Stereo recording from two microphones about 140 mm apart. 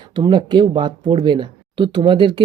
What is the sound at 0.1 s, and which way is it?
Speech, 35° right (ahead or behind).